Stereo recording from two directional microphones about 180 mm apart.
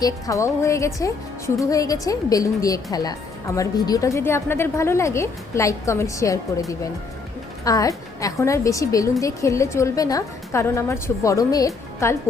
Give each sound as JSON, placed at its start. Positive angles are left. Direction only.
{"t": 0.0, "sound": "a woman's voice", "side_deg": 15}